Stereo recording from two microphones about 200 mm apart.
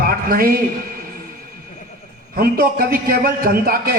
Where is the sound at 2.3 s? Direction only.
50° right (ahead or behind).